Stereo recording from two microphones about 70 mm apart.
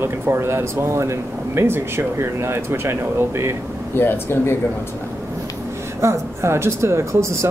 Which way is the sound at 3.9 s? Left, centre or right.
Left.